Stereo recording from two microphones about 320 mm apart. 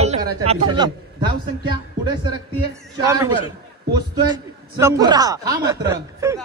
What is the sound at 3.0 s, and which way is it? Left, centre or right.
Speech, centre.